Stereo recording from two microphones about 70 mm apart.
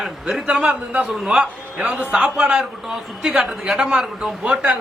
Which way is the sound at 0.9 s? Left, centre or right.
Centre.